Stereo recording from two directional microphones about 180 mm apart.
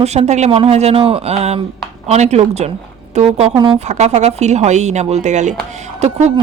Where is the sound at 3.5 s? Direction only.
25° right (ahead or behind).